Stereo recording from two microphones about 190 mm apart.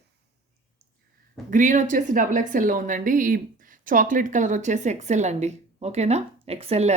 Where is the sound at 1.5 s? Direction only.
40° right (ahead or behind).